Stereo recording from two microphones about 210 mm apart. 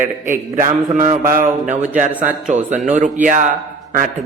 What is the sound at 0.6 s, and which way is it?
A man's voice, 35° right (ahead or behind).